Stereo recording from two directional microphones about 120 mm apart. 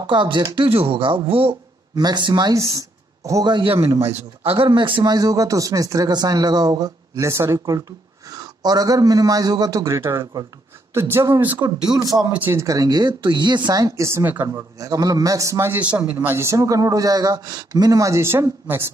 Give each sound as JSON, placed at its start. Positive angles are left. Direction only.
{"t": 0.0, "sound": "speech", "side_deg": -40}
{"t": 2.0, "sound": "speech", "side_deg": -35}
{"t": 4.2, "sound": "speech", "side_deg": -55}
{"t": 12.3, "sound": "speech", "side_deg": -15}